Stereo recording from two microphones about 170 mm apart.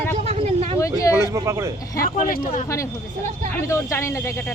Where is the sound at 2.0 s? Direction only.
55° left (ahead or behind).